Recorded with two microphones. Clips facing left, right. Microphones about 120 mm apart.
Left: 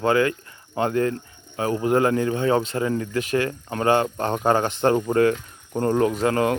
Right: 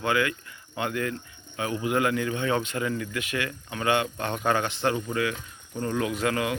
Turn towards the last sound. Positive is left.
turn(degrees=40)  # may be behind; listen again after turning